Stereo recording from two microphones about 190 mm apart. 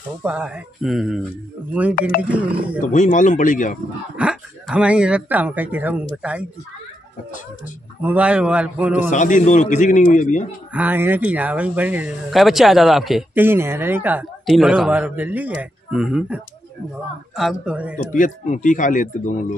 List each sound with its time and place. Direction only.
0.2 s speech: 5° right (ahead or behind)
2.0 s speech: 50° left (ahead or behind)
4.2 s speech: 5° right (ahead or behind)
8.0 s speech: 10° right (ahead or behind)
9.1 s a man's voice: 40° left (ahead or behind)
10.7 s speech: 10° right (ahead or behind)
17.4 s speech: 5° right (ahead or behind)
17.9 s speech: 40° left (ahead or behind)